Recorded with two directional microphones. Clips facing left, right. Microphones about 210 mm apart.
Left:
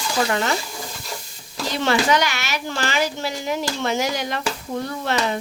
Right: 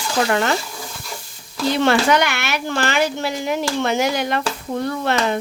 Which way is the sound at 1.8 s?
55° right (ahead or behind).